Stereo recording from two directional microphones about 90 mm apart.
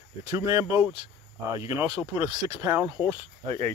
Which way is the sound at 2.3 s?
60° right (ahead or behind).